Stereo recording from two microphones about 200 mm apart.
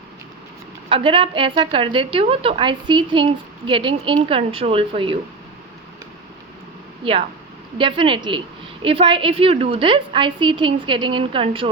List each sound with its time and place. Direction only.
0.9 s a woman's voice: 25° right (ahead or behind)
7.0 s a woman's voice: 25° right (ahead or behind)